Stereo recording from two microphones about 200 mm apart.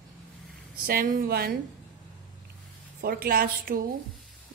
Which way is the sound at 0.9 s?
45° right (ahead or behind).